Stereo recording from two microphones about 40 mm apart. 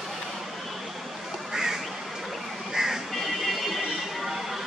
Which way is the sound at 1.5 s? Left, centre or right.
Centre.